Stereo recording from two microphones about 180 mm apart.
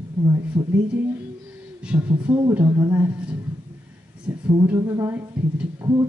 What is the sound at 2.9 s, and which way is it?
Speech, 10° right (ahead or behind).